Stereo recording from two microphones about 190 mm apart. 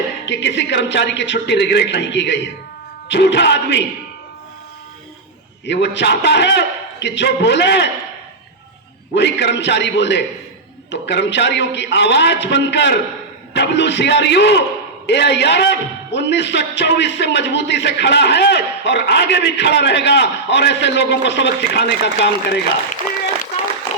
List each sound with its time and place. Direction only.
0.3 s a man's voice: 65° left (ahead or behind)
5.6 s a man's voice: 65° left (ahead or behind)
9.1 s a man's voice: 65° left (ahead or behind)